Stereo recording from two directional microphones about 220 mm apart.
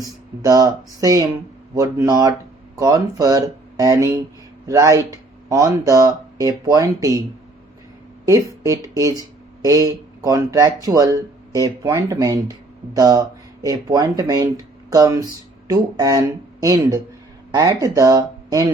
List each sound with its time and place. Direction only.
0.0 s speech: 15° right (ahead or behind)
8.2 s a woman's voice: 15° right (ahead or behind)